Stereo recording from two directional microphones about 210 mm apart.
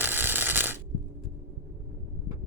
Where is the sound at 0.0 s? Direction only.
10° right (ahead or behind).